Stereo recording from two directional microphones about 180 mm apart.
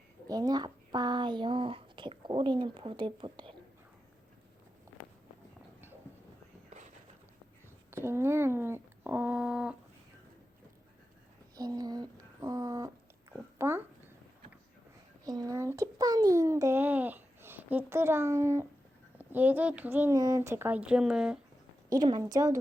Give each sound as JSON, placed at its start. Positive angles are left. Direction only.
{"t": 0.3, "sound": "speech", "side_deg": -20}
{"t": 7.9, "sound": "speech", "side_deg": -15}
{"t": 11.5, "sound": "a sound", "side_deg": -20}
{"t": 13.3, "sound": "speech", "side_deg": -15}
{"t": 15.2, "sound": "a child's voice", "side_deg": -20}
{"t": 21.8, "sound": "speech", "side_deg": -20}